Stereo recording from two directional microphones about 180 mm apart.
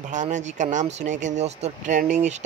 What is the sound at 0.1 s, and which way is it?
Speech, 45° right (ahead or behind).